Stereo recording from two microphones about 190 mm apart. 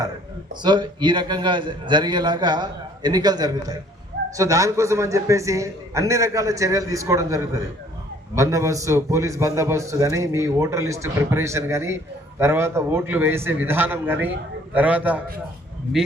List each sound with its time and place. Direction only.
0.6 s a man's voice: 25° right (ahead or behind); by 15.2 s 10° right (ahead or behind)